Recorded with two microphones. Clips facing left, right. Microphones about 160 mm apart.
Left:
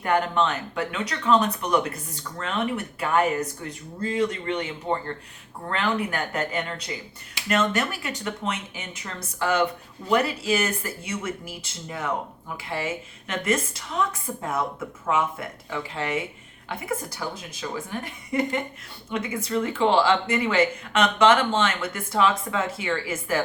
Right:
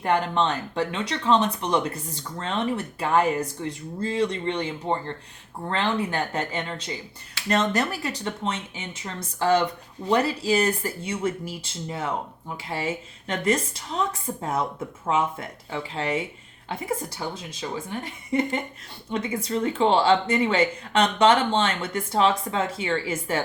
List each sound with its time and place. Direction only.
0.0 s speech: 30° right (ahead or behind)
19.1 s speech: 30° right (ahead or behind)